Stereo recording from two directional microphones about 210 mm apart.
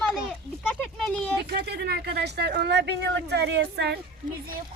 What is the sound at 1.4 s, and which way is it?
Speech, 50° right (ahead or behind).